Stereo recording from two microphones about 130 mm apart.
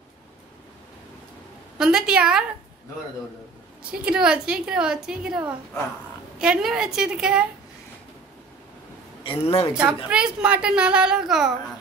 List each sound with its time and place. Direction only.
1.8 s a woman's voice: 5° right (ahead or behind)
4.0 s a woman's voice: 5° right (ahead or behind)
9.2 s a man's voice: 45° left (ahead or behind)
10.0 s a woman's voice: 10° right (ahead or behind)